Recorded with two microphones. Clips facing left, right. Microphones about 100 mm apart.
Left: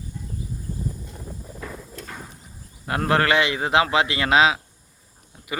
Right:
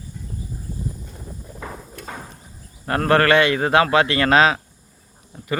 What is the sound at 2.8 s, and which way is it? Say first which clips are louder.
A man's voice: right 4 dB; 10° left (ahead or behind).